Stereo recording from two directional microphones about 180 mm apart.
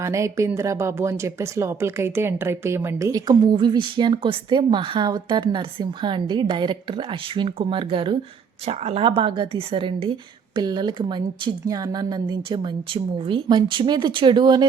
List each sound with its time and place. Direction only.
0.0 s speech: 15° right (ahead or behind)